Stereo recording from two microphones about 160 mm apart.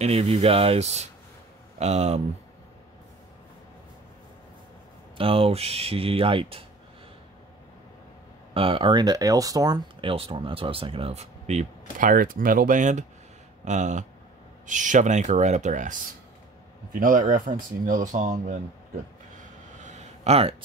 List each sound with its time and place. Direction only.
0.0 s speech: 40° right (ahead or behind)
5.1 s speech: 35° right (ahead or behind)
8.5 s speech: 35° right (ahead or behind); by 18.6 s 50° right (ahead or behind)
19.8 s a sound: 45° right (ahead or behind)